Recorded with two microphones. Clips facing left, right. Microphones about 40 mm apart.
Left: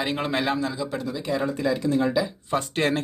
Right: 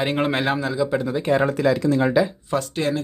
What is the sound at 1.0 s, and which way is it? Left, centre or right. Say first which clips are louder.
Speech: right 7 dB; right.